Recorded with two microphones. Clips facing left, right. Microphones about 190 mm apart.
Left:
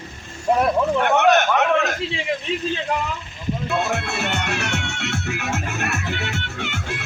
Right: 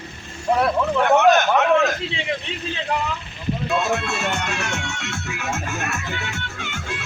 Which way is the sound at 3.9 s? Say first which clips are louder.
Right 1 dB; 60° left (ahead or behind).